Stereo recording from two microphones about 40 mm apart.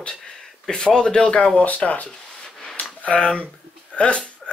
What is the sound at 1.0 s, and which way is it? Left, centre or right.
Speech, left.